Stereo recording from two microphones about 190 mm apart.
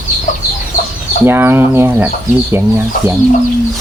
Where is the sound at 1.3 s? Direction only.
10° right (ahead or behind).